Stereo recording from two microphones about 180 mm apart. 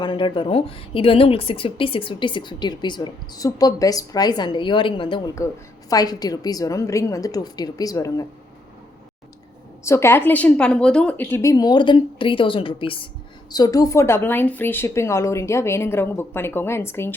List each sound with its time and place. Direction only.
0.0 s speech: 25° left (ahead or behind)
9.8 s a woman's voice: 15° left (ahead or behind)